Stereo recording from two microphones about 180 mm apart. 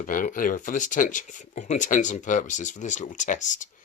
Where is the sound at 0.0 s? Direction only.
50° left (ahead or behind).